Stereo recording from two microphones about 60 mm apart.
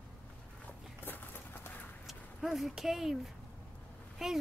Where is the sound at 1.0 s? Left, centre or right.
Left.